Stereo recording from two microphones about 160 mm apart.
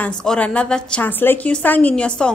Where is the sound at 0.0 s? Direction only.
5° left (ahead or behind).